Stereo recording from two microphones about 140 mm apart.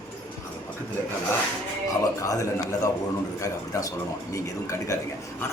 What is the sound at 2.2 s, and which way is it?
Speech, 25° left (ahead or behind).